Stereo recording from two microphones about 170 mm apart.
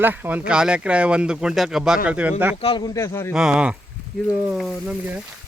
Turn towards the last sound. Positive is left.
turn(degrees=-5)  # may be behind; listen again after turning